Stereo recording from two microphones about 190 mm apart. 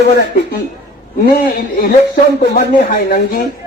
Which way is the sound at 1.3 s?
50° left (ahead or behind).